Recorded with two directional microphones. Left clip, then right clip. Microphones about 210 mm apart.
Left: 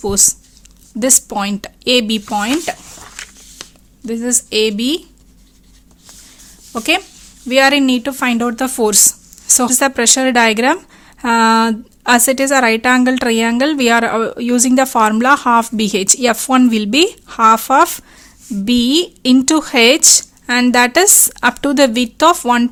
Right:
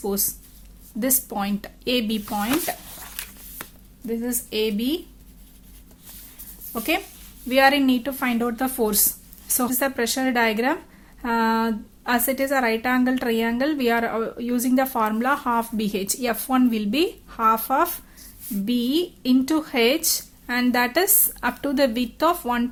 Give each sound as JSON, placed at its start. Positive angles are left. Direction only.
{"t": 0.0, "sound": "speech", "side_deg": 45}
{"t": 4.0, "sound": "speech", "side_deg": 45}
{"t": 6.7, "sound": "speech", "side_deg": 45}